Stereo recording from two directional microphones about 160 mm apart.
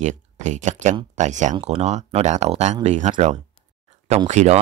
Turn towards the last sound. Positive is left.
turn(degrees=-45)  # may be behind; listen again after turning